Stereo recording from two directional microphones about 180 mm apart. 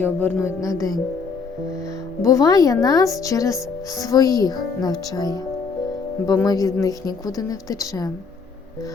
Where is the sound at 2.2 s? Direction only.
20° left (ahead or behind).